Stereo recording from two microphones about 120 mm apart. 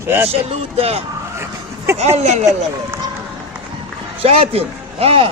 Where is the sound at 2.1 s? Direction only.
70° right (ahead or behind).